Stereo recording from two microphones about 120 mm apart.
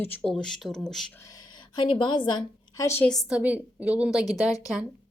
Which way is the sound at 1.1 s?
30° left (ahead or behind).